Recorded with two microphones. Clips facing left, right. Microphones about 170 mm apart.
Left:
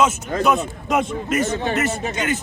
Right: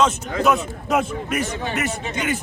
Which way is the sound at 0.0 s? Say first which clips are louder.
Even; 5° left (ahead or behind).